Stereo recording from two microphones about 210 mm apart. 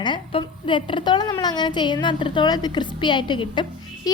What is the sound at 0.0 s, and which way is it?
A woman's voice, 25° left (ahead or behind).